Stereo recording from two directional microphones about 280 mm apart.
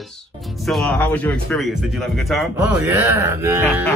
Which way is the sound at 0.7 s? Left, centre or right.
Centre.